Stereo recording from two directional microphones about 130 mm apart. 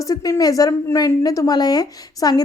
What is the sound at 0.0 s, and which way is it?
A woman's voice, 25° left (ahead or behind).